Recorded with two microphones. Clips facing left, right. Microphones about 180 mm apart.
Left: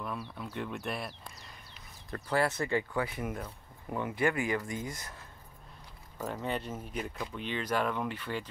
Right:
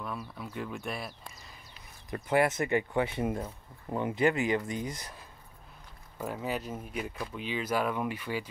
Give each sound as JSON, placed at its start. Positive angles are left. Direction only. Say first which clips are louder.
{"t": 0.0, "sound": "speech", "louder": "even", "side_deg": 0}
{"t": 2.0, "sound": "speech", "louder": "right 3 dB", "side_deg": -20}
{"t": 6.2, "sound": "speech", "louder": "right 1 dB", "side_deg": -5}